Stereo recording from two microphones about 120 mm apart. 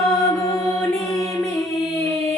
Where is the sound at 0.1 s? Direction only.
30° left (ahead or behind).